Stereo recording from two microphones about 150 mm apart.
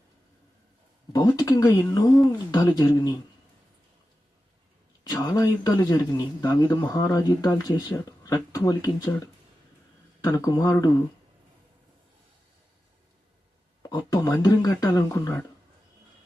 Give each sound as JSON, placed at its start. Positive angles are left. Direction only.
{"t": 1.4, "sound": "speech", "side_deg": 20}
{"t": 5.0, "sound": "speech", "side_deg": 25}
{"t": 13.8, "sound": "speech", "side_deg": 25}